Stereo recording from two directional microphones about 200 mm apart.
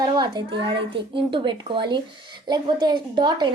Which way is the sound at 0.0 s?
20° right (ahead or behind).